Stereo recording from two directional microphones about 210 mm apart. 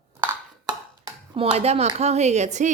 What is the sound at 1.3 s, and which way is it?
Speech, 25° right (ahead or behind).